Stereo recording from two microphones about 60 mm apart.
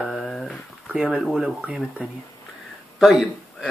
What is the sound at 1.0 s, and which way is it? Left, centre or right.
Speech, centre.